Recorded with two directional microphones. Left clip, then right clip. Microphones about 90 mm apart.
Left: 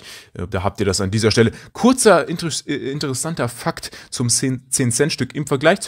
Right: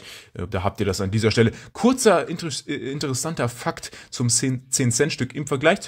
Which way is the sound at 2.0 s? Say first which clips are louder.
Left 5 dB; 40° left (ahead or behind).